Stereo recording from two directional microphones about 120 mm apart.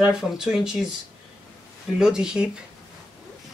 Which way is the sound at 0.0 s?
5° right (ahead or behind).